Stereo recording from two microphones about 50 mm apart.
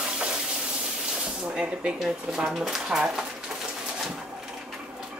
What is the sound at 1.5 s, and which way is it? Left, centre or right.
Speech, centre.